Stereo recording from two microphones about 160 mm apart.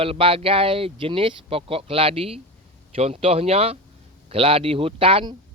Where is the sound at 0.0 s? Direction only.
35° right (ahead or behind).